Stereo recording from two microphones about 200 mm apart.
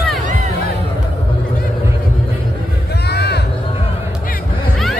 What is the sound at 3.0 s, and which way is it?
Music, 55° left (ahead or behind).